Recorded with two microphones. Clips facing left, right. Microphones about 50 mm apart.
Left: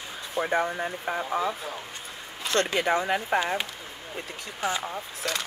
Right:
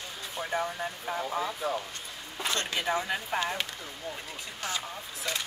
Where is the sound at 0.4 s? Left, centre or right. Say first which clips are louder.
Left 6 dB; left.